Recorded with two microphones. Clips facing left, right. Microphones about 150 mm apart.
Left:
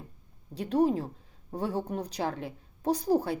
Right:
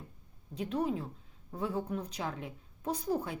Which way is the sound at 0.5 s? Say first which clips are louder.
Left 7 dB; 35° left (ahead or behind).